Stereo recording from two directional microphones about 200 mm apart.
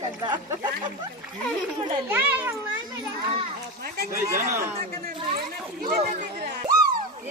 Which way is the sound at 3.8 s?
50° right (ahead or behind).